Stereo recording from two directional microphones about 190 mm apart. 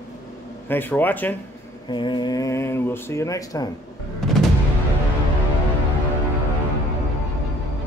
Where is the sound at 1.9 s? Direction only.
25° left (ahead or behind).